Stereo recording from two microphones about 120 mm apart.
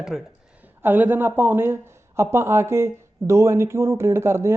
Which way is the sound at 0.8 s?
15° right (ahead or behind).